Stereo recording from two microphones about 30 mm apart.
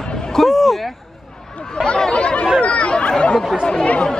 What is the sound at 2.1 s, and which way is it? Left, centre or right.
Chatter, left.